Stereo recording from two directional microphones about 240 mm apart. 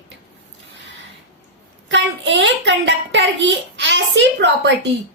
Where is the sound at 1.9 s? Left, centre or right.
Right.